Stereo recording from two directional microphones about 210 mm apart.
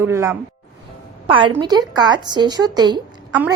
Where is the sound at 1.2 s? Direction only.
25° right (ahead or behind).